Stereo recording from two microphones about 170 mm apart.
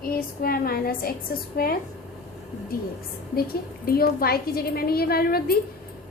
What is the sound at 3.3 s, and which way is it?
A woman's voice, 60° left (ahead or behind).